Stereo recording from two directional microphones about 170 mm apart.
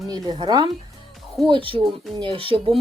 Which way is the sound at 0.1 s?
25° right (ahead or behind).